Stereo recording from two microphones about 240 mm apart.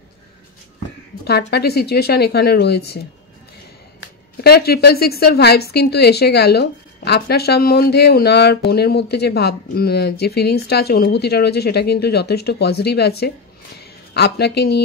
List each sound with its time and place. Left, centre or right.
1.5 s a woman's voice: left
4.4 s a woman's voice: left